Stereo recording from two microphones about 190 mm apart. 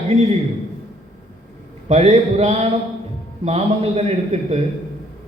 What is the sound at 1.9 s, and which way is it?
A man's voice, 35° right (ahead or behind).